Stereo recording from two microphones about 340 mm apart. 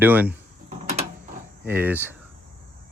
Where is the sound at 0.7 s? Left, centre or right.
Right.